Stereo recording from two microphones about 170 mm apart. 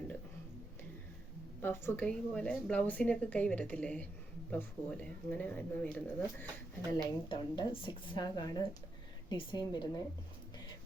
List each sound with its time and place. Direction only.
1.6 s a woman's voice: 15° left (ahead or behind)
6.9 s speech: 25° left (ahead or behind)